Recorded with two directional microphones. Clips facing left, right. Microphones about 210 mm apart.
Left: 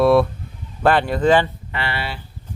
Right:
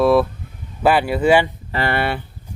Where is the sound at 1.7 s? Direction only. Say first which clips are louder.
Right 6 dB; 45° right (ahead or behind).